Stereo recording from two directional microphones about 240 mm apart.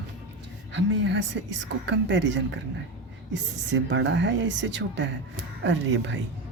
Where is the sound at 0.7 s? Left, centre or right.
Right.